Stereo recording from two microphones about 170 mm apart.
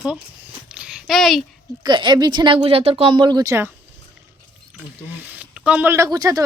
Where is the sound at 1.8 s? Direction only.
25° right (ahead or behind).